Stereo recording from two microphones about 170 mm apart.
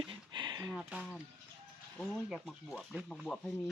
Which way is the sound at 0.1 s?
25° right (ahead or behind).